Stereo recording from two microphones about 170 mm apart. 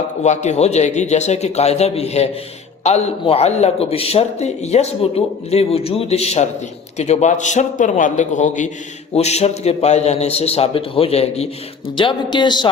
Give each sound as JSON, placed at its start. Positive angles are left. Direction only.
{"t": 0.2, "sound": "a man's voice", "side_deg": 40}
{"t": 11.9, "sound": "speech", "side_deg": 25}